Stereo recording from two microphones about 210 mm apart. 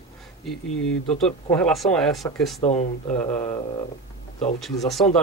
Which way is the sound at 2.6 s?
30° left (ahead or behind).